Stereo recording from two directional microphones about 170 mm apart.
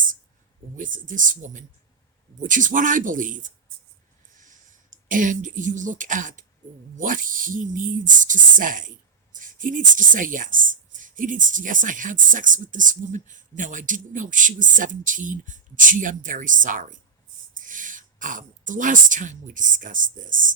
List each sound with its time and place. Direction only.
0.8 s speech: 50° right (ahead or behind)